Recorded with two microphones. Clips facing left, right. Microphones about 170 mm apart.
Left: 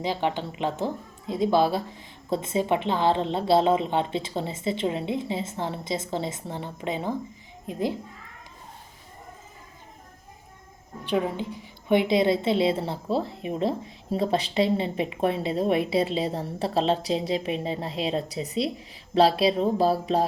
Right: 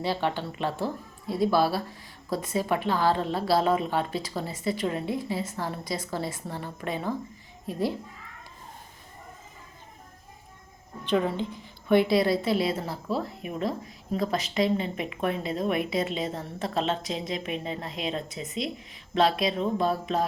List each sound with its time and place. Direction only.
0.0 s a woman's voice: 15° left (ahead or behind)
11.0 s a woman's voice: 10° left (ahead or behind); by 20.2 s 30° left (ahead or behind)